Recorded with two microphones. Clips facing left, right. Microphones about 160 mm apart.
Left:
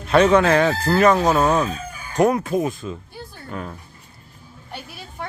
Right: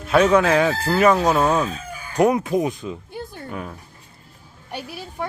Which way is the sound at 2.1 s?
10° right (ahead or behind).